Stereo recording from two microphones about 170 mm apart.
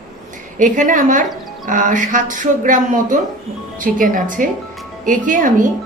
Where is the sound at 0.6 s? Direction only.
50° right (ahead or behind).